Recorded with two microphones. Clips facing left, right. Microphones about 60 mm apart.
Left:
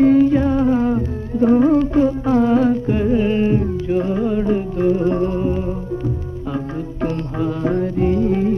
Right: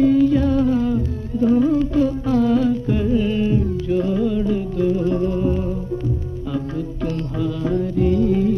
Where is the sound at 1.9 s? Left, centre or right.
Left.